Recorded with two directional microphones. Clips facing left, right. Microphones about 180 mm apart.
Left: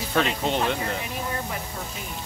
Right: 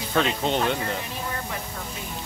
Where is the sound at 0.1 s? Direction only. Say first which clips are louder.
Right 1 dB; centre (ahead or behind).